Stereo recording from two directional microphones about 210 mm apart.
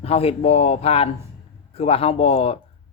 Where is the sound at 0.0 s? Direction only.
30° left (ahead or behind).